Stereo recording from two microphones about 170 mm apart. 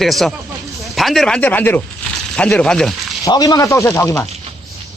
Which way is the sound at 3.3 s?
20° left (ahead or behind).